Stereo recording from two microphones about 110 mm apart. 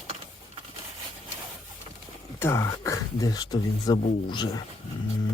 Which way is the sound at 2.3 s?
25° left (ahead or behind).